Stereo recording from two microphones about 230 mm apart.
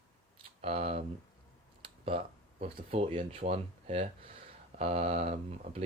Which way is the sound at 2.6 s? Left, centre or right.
Right.